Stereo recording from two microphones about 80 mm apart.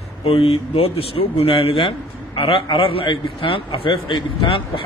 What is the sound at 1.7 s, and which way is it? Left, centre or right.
A man's voice, left.